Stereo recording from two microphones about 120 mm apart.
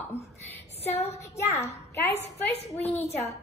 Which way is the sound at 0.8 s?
60° left (ahead or behind).